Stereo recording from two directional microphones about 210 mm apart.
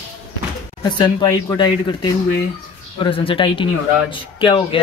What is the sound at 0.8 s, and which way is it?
Speech, 20° left (ahead or behind).